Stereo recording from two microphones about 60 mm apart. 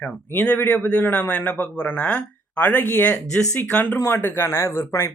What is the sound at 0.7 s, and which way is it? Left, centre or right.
A man's voice, left.